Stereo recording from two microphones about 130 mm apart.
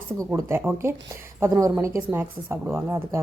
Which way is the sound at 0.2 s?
20° right (ahead or behind).